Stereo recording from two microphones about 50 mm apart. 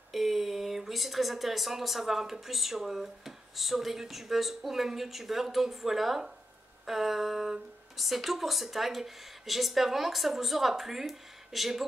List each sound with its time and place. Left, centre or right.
0.1 s speech: centre